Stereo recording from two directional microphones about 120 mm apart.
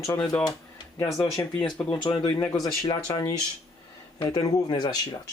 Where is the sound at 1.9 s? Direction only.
45° left (ahead or behind).